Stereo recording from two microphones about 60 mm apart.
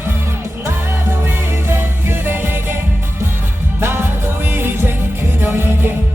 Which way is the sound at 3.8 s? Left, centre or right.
Right.